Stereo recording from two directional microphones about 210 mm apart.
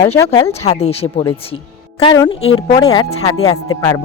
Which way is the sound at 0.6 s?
30° left (ahead or behind).